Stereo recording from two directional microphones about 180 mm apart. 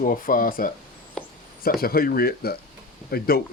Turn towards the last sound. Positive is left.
turn(degrees=60)  # may be behind; listen again after turning